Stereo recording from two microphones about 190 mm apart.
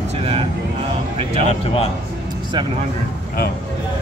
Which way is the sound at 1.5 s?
30° left (ahead or behind).